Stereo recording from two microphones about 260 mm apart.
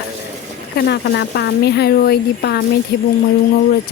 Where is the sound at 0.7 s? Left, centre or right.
Left.